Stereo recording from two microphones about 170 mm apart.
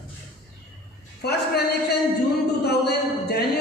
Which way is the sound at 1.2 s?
70° left (ahead or behind).